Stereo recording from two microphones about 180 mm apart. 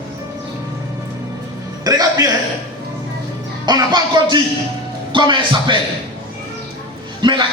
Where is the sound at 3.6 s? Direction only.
20° right (ahead or behind).